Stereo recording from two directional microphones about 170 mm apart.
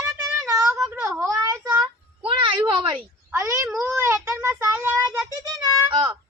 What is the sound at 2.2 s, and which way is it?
Speech, 30° right (ahead or behind).